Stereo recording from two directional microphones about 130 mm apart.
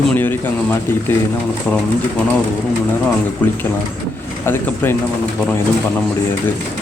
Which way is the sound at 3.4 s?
10° left (ahead or behind).